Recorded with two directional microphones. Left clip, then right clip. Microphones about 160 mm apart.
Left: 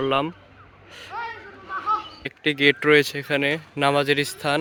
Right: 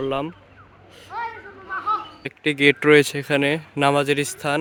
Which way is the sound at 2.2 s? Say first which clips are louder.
Right 2 dB; 15° right (ahead or behind).